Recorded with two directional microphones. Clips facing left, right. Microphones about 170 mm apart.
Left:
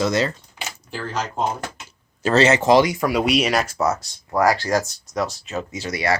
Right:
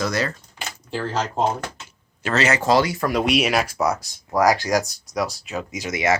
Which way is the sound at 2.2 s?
30° left (ahead or behind).